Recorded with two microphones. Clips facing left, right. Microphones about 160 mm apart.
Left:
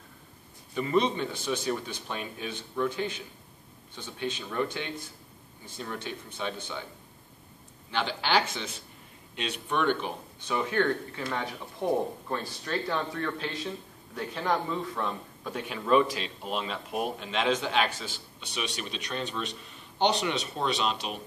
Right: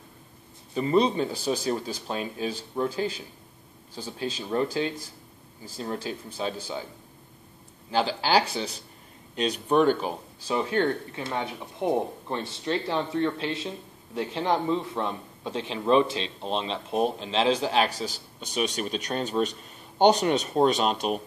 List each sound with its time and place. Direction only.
0.7 s a man's voice: 35° right (ahead or behind)
7.9 s a man's voice: 35° right (ahead or behind)